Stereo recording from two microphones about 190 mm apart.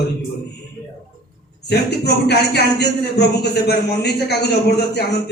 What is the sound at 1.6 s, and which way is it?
A man's voice, 60° left (ahead or behind).